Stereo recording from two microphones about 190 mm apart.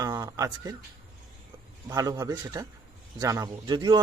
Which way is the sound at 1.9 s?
20° right (ahead or behind).